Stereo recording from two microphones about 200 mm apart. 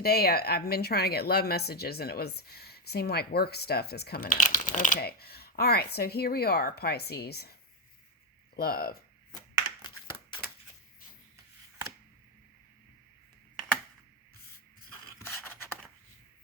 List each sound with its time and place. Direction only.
0.0 s speech: 50° left (ahead or behind)
8.5 s speech: 50° left (ahead or behind)
15.2 s a sound: 10° left (ahead or behind)